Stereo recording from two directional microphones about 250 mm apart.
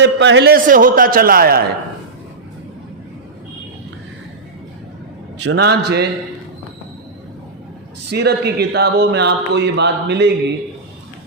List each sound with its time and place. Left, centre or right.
0.0 s a man's voice: right
5.5 s a man's voice: right
8.1 s a man's voice: right